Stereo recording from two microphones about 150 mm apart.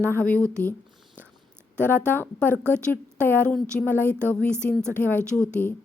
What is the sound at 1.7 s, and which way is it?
Speech, 10° left (ahead or behind).